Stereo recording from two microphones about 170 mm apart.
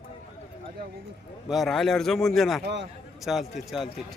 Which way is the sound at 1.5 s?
Centre (ahead or behind).